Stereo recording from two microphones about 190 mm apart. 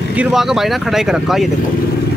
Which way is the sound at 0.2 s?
Centre (ahead or behind).